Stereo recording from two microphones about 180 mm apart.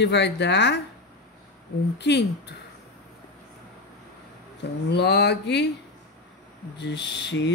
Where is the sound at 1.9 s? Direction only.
70° left (ahead or behind).